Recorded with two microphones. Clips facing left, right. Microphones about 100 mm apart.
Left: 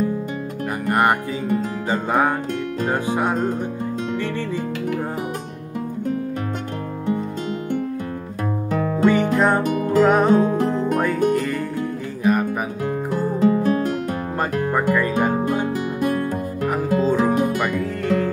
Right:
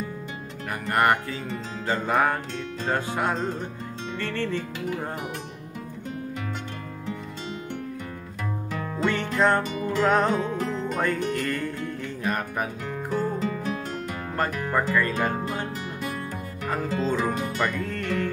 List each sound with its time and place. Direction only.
0.8 s music: 15° left (ahead or behind)
9.0 s music: 10° left (ahead or behind)
10.3 s music: 45° left (ahead or behind)
11.3 s music: 10° left (ahead or behind)
13.4 s music: 50° left (ahead or behind)
14.4 s music: 15° left (ahead or behind)
16.0 s music: 50° left (ahead or behind)
17.1 s music: 15° left (ahead or behind)